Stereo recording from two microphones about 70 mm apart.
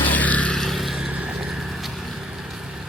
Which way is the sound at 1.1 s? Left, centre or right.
Centre.